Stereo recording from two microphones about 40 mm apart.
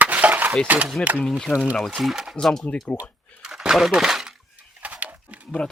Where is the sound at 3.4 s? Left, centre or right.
Centre.